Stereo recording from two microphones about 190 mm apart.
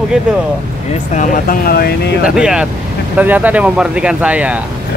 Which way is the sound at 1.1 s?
40° left (ahead or behind).